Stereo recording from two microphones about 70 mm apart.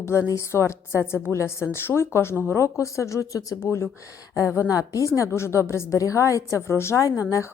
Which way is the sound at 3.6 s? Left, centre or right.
Left.